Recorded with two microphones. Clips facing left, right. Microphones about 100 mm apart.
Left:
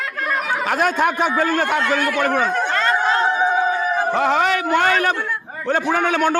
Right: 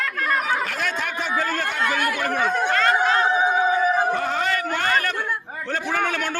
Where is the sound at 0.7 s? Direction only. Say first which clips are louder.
Left 9 dB; 50° left (ahead or behind).